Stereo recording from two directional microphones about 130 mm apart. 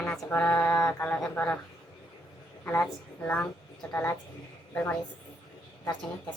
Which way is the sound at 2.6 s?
15° left (ahead or behind).